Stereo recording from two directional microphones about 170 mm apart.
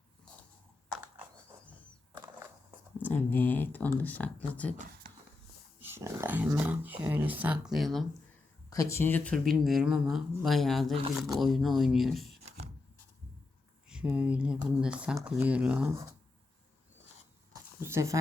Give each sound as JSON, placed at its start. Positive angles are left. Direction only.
{"t": 3.0, "sound": "speech", "side_deg": 10}
{"t": 5.8, "sound": "speech", "side_deg": -15}
{"t": 8.7, "sound": "speech", "side_deg": 20}
{"t": 13.8, "sound": "speech", "side_deg": -5}
{"t": 17.5, "sound": "a sound", "side_deg": -15}